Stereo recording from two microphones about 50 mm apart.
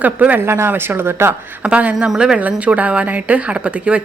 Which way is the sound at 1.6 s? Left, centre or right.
Right.